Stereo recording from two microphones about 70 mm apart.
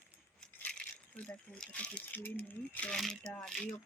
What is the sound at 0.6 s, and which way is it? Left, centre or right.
Rattle, centre.